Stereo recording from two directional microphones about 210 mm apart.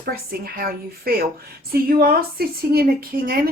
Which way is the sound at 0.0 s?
45° right (ahead or behind).